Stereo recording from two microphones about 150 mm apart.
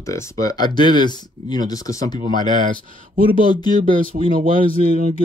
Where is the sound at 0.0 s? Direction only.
20° left (ahead or behind).